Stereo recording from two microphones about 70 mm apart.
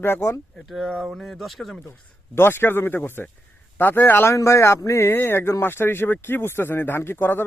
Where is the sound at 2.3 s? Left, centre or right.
Left.